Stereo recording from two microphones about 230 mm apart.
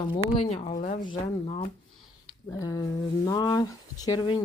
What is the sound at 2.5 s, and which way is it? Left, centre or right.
Speech, centre.